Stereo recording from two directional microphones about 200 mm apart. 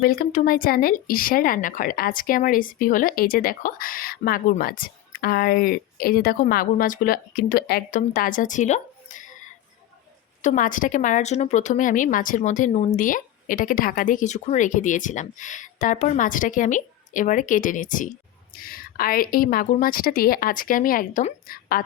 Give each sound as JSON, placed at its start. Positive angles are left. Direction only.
{"t": 0.0, "sound": "speech", "side_deg": 45}
{"t": 10.4, "sound": "a woman's voice", "side_deg": 40}